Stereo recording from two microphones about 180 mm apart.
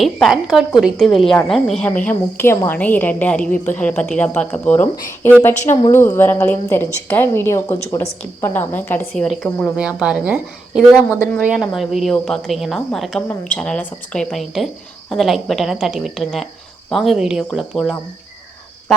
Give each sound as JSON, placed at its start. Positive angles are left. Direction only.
{"t": 0.0, "sound": "a woman's voice", "side_deg": 0}
{"t": 10.9, "sound": "a woman's voice", "side_deg": 15}
{"t": 11.4, "sound": "a woman's voice", "side_deg": 0}